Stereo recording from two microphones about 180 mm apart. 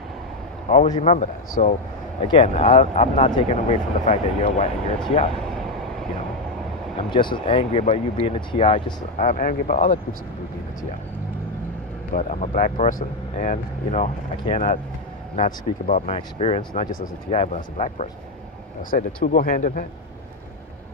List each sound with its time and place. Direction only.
0.7 s speech: 40° left (ahead or behind)
2.2 s speech: 35° left (ahead or behind)
7.1 s speech: 25° left (ahead or behind)
9.2 s speech: 45° left (ahead or behind)
12.1 s speech: 40° left (ahead or behind)